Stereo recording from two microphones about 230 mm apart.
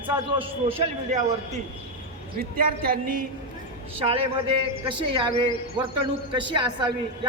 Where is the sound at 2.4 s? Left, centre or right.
Right.